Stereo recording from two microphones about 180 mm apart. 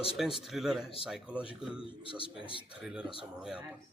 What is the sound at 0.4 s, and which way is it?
Speech, centre (ahead or behind).